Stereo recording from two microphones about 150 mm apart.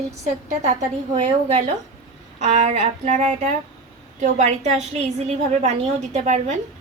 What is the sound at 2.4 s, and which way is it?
A woman's voice, 50° right (ahead or behind).